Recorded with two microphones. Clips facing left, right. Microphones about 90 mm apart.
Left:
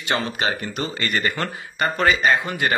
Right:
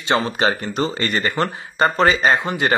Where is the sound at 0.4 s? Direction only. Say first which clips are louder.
Right 5 dB; 30° right (ahead or behind).